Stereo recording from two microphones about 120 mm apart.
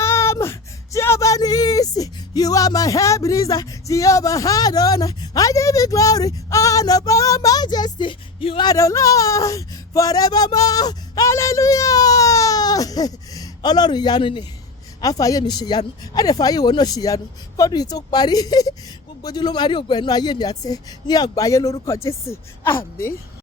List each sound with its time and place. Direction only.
0.0 s a sound: 20° left (ahead or behind)
0.9 s speech: 25° left (ahead or behind); by 8.6 s 45° left (ahead or behind)
8.6 s speech: 30° left (ahead or behind); by 14.4 s 45° left (ahead or behind)
15.0 s speech: 30° left (ahead or behind)